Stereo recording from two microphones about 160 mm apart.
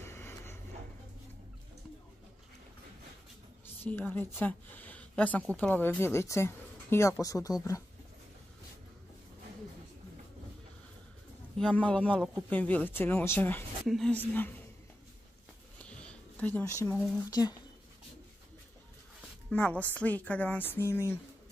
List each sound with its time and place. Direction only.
0.0 s vehicle: 15° left (ahead or behind)
3.8 s speech: 10° left (ahead or behind)
11.5 s speech: 5° left (ahead or behind)
15.8 s a sound: 5° left (ahead or behind)
16.9 s speech: centre (ahead or behind)
17.2 s speech: 20° left (ahead or behind)
19.5 s speech: 10° left (ahead or behind)